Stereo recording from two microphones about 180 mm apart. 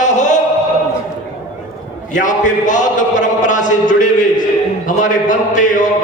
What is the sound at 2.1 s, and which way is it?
Speech, 45° left (ahead or behind).